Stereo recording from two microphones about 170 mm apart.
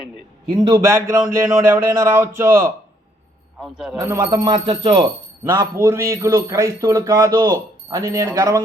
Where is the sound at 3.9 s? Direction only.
20° right (ahead or behind).